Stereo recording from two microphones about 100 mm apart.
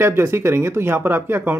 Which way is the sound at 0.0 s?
25° right (ahead or behind).